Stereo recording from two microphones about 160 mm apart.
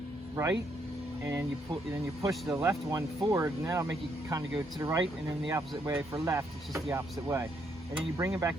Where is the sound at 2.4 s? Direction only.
15° right (ahead or behind).